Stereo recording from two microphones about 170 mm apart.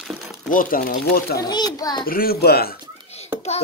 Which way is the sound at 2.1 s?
60° left (ahead or behind).